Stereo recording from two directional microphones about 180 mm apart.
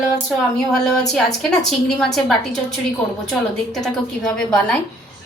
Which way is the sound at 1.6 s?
Centre (ahead or behind).